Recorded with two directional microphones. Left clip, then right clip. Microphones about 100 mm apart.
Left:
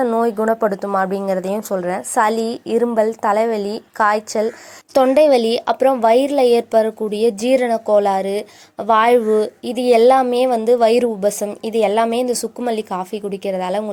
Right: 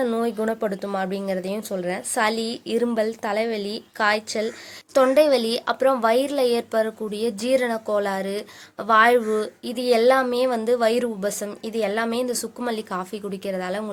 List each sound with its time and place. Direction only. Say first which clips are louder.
0.0 s a woman's voice: left 7 dB; centre (ahead or behind)
5.1 s speech: left 5 dB; 40° left (ahead or behind)